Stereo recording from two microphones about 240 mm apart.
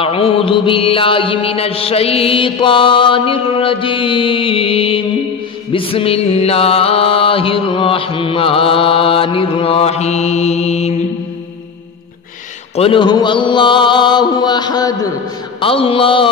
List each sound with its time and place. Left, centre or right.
0.0 s music: left
12.7 s music: left